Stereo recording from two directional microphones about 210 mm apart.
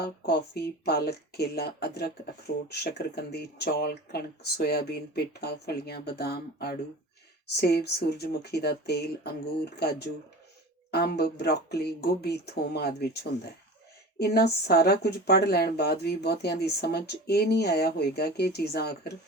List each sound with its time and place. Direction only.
0.0 s a woman's voice: 50° left (ahead or behind)
10.9 s a woman's voice: 50° left (ahead or behind)